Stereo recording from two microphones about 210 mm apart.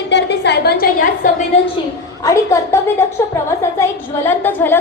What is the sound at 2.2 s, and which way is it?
A woman's voice, 15° left (ahead or behind).